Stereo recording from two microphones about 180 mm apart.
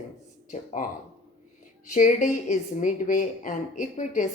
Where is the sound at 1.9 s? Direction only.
45° left (ahead or behind).